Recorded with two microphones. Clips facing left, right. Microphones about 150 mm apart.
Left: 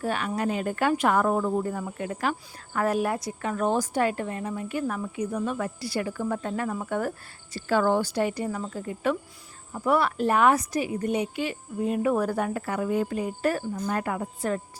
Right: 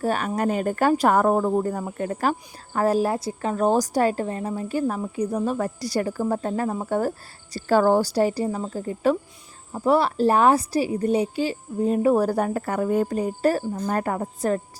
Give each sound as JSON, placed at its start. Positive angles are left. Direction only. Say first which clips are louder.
{"t": 0.0, "sound": "a woman's voice", "louder": "right 4 dB", "side_deg": -40}